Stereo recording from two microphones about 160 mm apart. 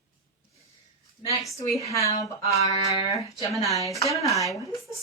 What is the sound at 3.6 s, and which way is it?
Speech, 20° left (ahead or behind).